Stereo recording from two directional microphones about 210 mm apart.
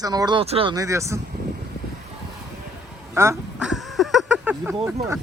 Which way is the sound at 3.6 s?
Centre (ahead or behind).